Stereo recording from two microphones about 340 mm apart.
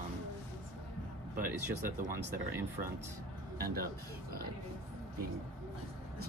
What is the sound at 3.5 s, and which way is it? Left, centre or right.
Speech, right.